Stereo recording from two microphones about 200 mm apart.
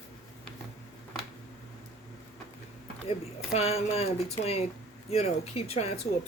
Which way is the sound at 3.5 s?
30° left (ahead or behind).